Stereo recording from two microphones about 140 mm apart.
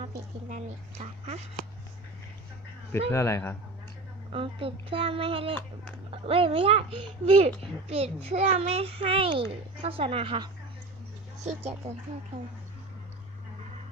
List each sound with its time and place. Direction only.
0.0 s a sound: 55° right (ahead or behind)
3.1 s a man's voice: 20° left (ahead or behind)
4.3 s a child's voice: 40° right (ahead or behind)
11.4 s a child's voice: 50° right (ahead or behind)